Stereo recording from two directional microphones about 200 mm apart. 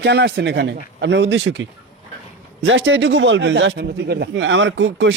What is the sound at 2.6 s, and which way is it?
Speech, 65° right (ahead or behind).